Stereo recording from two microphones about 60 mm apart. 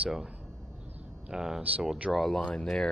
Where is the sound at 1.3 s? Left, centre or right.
Centre.